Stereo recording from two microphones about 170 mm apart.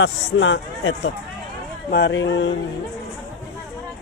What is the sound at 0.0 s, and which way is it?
A man's voice, 90° left.